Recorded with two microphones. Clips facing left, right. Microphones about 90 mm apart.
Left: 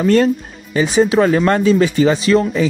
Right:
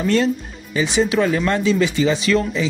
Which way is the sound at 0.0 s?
45° left (ahead or behind).